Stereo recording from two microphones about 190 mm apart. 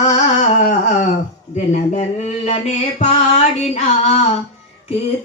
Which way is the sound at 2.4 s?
35° left (ahead or behind).